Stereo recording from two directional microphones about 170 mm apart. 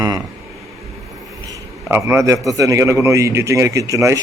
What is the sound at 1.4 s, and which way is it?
A man's voice, 15° right (ahead or behind).